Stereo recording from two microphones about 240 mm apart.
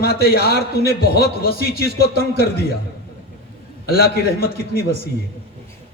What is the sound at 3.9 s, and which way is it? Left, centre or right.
A man's voice, left.